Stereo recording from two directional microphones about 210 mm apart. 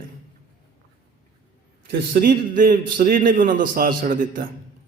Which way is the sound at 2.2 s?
40° right (ahead or behind).